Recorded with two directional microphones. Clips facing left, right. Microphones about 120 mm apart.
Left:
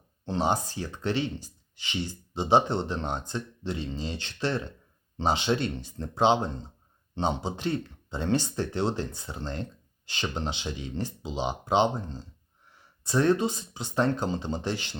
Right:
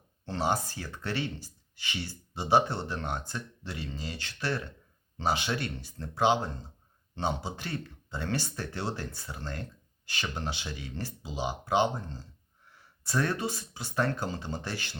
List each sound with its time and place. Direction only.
0.3 s speech: 20° left (ahead or behind)